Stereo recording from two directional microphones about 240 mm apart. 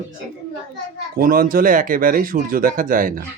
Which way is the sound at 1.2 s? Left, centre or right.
Right.